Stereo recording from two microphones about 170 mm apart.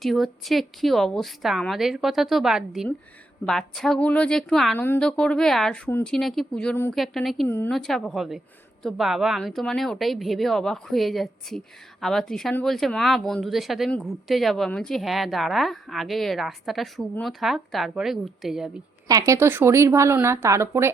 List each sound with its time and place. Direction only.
0.0 s a woman's voice: centre (ahead or behind)
7.4 s a woman's voice: 10° left (ahead or behind)
19.0 s a woman's voice: 20° right (ahead or behind)